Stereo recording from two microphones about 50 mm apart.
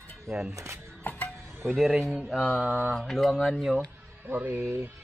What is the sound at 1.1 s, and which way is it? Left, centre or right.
Music, left.